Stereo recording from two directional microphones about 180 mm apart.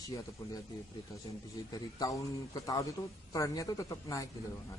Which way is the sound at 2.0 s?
20° left (ahead or behind).